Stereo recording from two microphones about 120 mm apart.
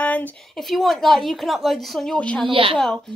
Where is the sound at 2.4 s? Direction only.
45° right (ahead or behind).